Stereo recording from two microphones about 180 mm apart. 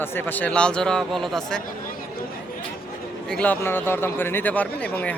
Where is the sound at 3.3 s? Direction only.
5° left (ahead or behind).